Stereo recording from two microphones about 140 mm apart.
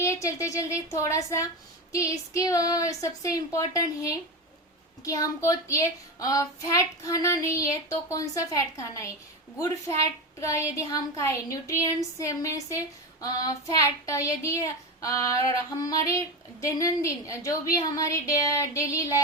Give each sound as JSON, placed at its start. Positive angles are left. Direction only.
{"t": 0.0, "sound": "speech", "side_deg": 20}